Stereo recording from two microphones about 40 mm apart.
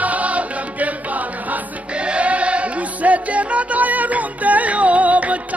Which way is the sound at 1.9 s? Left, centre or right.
Right.